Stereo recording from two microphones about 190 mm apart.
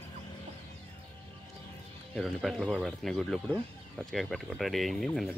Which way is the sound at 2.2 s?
Centre (ahead or behind).